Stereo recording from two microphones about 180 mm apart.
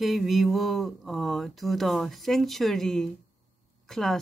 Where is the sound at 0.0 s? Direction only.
Centre (ahead or behind).